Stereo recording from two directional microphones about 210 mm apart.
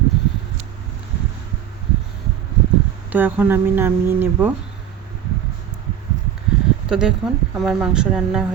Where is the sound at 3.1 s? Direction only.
10° right (ahead or behind).